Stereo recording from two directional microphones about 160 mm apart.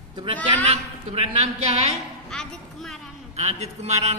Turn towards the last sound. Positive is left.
turn(degrees=-45)  # may be behind; listen again after turning